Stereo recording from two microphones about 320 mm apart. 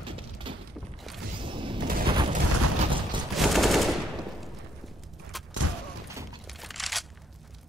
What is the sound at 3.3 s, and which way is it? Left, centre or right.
Machine gun, centre.